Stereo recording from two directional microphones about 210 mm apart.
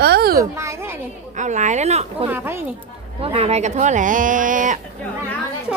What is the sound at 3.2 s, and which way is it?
Speech, 30° right (ahead or behind).